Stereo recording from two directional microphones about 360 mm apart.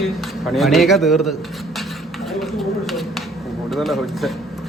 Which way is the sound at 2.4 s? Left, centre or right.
Centre.